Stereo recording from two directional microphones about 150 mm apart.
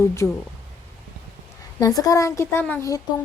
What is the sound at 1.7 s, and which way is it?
Speech, 25° left (ahead or behind).